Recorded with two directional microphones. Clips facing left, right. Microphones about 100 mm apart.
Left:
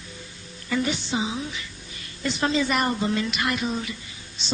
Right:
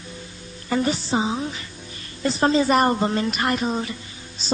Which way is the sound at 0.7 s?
40° right (ahead or behind).